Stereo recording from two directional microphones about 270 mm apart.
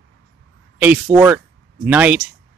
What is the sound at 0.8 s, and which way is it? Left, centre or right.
Speech, centre.